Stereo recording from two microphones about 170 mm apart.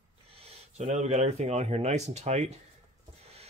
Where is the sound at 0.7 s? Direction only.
40° right (ahead or behind).